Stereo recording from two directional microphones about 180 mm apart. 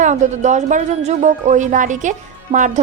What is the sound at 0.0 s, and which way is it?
A woman's voice, 40° right (ahead or behind).